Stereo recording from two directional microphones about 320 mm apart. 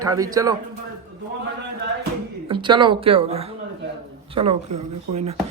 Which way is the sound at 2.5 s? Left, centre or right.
Centre.